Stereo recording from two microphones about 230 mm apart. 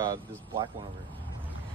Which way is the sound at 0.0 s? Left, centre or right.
Centre.